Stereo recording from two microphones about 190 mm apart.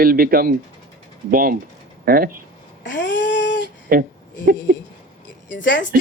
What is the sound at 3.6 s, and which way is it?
Speech, 50° right (ahead or behind).